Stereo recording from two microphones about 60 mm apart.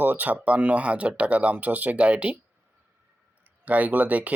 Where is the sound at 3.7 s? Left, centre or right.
Right.